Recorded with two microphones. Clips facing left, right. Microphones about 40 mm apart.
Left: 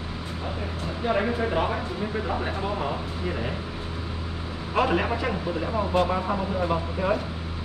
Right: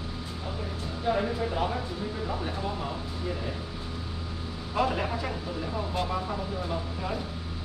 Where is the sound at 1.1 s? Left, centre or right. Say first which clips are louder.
Left 3 dB; left.